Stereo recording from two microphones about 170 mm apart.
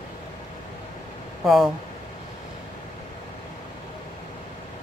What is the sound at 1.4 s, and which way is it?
Speech, centre (ahead or behind).